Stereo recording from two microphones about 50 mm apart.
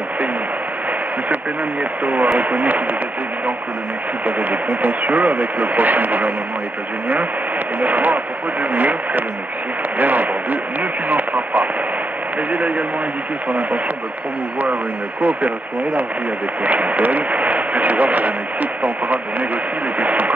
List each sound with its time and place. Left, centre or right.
2.3 s speech: right
4.4 s speech: right
7.8 s speech: right
16.6 s speech: right